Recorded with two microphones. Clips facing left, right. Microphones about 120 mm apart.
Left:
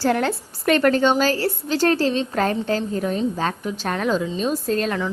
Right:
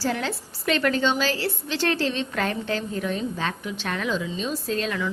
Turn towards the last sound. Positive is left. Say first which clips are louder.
# left 4 dB
turn(degrees=45)  # may be behind; listen again after turning